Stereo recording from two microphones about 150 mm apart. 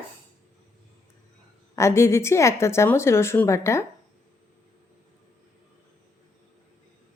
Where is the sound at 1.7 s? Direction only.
20° left (ahead or behind).